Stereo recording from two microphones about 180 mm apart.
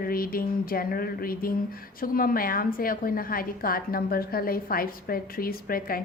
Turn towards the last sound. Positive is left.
turn(degrees=55)  # may be behind; listen again after turning